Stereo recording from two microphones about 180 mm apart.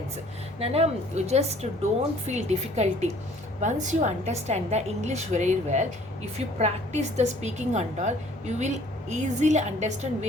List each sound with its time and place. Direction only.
0.6 s a woman's voice: 35° right (ahead or behind)